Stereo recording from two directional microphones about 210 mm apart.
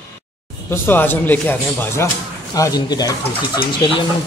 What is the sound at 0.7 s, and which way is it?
Speech, 10° left (ahead or behind).